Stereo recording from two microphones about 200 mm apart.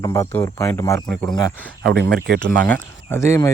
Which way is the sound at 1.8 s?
60° right (ahead or behind).